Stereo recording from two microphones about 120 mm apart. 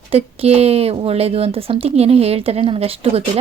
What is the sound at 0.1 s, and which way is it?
Speech, 55° right (ahead or behind).